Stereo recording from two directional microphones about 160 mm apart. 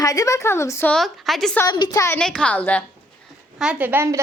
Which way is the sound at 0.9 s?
Centre (ahead or behind).